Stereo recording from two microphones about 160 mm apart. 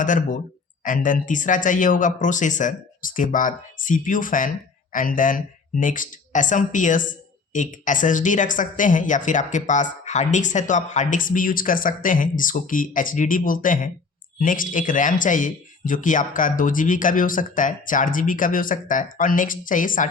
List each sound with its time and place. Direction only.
0.0 s speech: 55° left (ahead or behind)